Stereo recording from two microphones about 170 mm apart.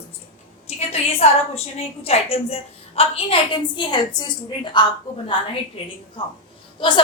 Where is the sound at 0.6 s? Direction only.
35° left (ahead or behind).